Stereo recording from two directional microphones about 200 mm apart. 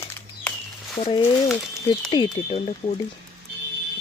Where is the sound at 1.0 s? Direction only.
25° left (ahead or behind).